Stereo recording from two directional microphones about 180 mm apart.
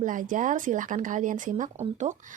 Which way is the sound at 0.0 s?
45° right (ahead or behind).